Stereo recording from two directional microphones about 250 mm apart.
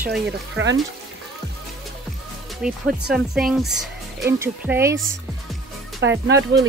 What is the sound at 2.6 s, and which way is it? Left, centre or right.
Speech, centre.